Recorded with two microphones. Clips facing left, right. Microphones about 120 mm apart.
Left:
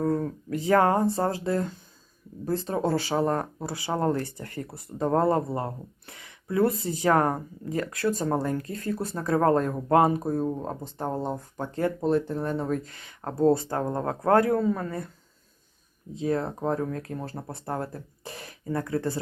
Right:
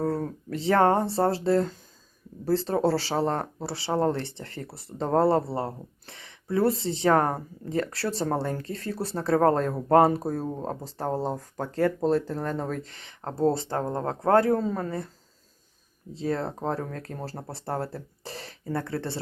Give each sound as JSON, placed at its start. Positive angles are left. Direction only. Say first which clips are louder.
{"t": 0.0, "sound": "speech", "louder": "left 2 dB", "side_deg": -35}
{"t": 12.8, "sound": "speech", "louder": "left 1 dB", "side_deg": -30}
{"t": 16.1, "sound": "speech", "louder": "left 2 dB", "side_deg": -35}
{"t": 17.9, "sound": "throat clearing", "louder": "right 2 dB", "side_deg": -30}
{"t": 18.9, "sound": "speech", "louder": "left 3 dB", "side_deg": -30}